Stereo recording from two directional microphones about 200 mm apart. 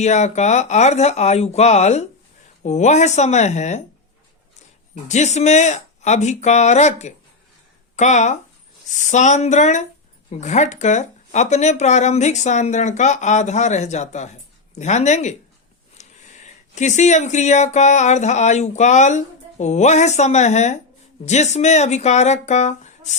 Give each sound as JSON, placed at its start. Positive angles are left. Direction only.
{"t": 0.0, "sound": "speech", "side_deg": 35}
{"t": 5.0, "sound": "speech", "side_deg": 35}